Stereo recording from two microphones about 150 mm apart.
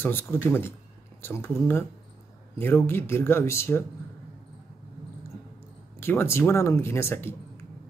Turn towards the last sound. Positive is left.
turn(degrees=15)  # may be behind; listen again after turning